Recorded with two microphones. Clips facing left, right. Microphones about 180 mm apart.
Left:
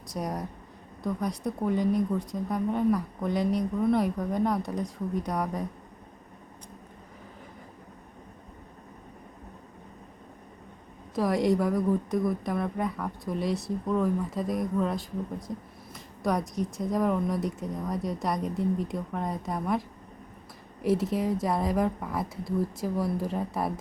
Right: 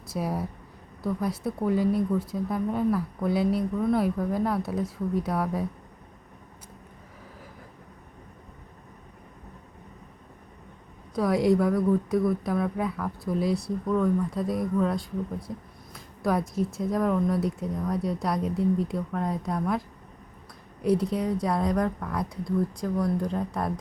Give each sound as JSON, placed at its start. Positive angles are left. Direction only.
{"t": 0.1, "sound": "speech", "side_deg": -5}
{"t": 11.1, "sound": "speech", "side_deg": 0}
{"t": 20.8, "sound": "speech", "side_deg": 0}